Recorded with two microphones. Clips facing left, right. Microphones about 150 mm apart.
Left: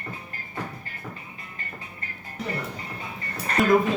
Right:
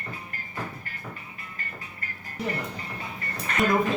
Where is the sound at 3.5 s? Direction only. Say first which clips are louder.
Left 3 dB; 35° left (ahead or behind).